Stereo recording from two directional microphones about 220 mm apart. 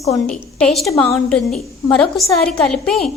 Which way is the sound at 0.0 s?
10° left (ahead or behind).